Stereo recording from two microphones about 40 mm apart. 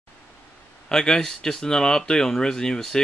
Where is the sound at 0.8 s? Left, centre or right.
Centre.